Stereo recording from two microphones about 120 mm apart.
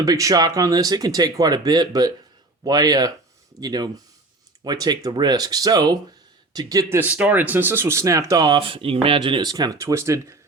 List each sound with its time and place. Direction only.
0.0 s speech: 30° right (ahead or behind)
7.0 s speech: 10° right (ahead or behind); by 8.6 s 30° right (ahead or behind)
8.6 s speech: 50° right (ahead or behind)
9.5 s speech: 30° right (ahead or behind)